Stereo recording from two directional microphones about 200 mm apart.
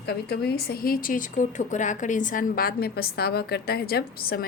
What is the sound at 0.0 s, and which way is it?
Speech, 50° left (ahead or behind).